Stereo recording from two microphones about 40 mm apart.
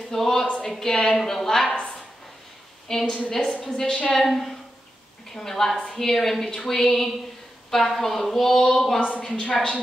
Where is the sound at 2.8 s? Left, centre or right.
Centre.